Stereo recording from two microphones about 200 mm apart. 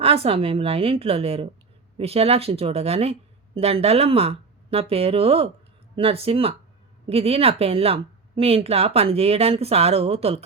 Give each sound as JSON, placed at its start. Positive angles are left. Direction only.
{"t": 0.0, "sound": "speech", "side_deg": -30}